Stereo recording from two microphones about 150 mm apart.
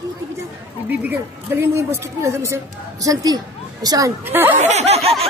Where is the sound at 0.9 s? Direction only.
10° right (ahead or behind).